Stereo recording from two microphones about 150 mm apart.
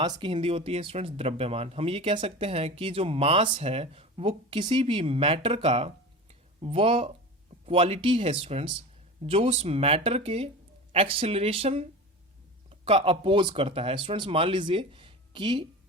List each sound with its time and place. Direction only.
0.0 s speech: 35° right (ahead or behind)